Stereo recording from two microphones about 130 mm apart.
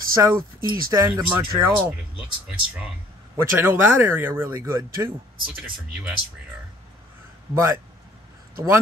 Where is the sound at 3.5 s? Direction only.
15° right (ahead or behind).